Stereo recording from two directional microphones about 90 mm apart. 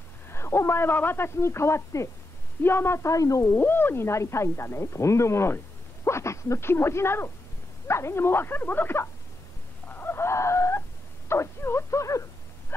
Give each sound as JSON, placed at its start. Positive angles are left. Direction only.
{"t": 0.3, "sound": "speech", "side_deg": 30}
{"t": 3.5, "sound": "speech", "side_deg": 25}
{"t": 9.8, "sound": "a sound", "side_deg": 25}